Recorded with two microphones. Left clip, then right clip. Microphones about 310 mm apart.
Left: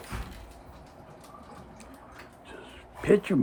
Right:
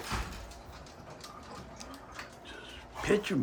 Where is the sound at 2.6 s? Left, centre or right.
Centre.